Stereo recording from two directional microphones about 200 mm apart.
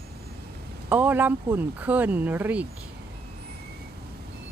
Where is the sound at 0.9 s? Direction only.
10° right (ahead or behind).